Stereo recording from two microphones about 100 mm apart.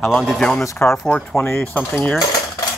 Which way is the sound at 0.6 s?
30° left (ahead or behind).